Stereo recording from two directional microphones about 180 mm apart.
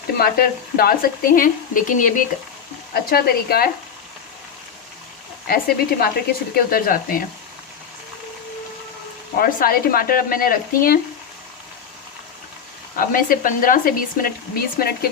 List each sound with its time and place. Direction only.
0.2 s a woman's voice: 55° left (ahead or behind)
2.9 s speech: 60° left (ahead or behind)
5.5 s a woman's voice: 55° left (ahead or behind)
9.4 s a woman's voice: 55° left (ahead or behind)
13.0 s a woman's voice: 50° left (ahead or behind)